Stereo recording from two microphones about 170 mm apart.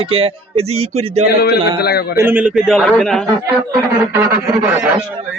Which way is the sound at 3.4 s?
15° right (ahead or behind).